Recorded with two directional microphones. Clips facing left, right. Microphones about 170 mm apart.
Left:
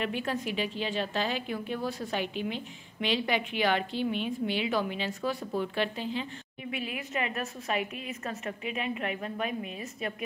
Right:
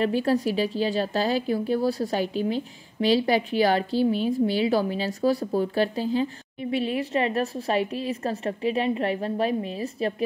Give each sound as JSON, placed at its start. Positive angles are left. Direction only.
{"t": 0.0, "sound": "a woman's voice", "side_deg": -35}